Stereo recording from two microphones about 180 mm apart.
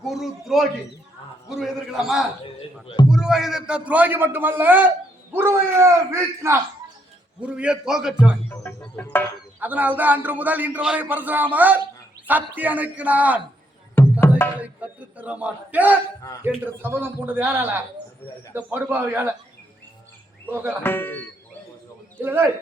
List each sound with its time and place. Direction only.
0.0 s a man's voice: centre (ahead or behind)
2.6 s speech: 25° left (ahead or behind)
3.1 s a man's voice: 5° right (ahead or behind)
8.4 s music: 10° left (ahead or behind)
9.6 s a man's voice: 10° right (ahead or behind)
13.9 s music: 10° left (ahead or behind)
14.6 s a man's voice: 10° right (ahead or behind)
20.5 s a man's voice: 10° right (ahead or behind)
20.8 s music: 10° left (ahead or behind)
22.2 s a man's voice: 10° right (ahead or behind)